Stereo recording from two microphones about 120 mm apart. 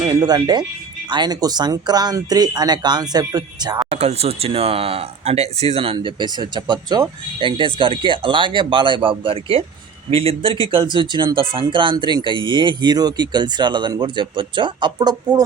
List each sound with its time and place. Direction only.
0.1 s speech: 30° right (ahead or behind)
3.9 s speech: 60° right (ahead or behind); by 15.4 s 35° right (ahead or behind)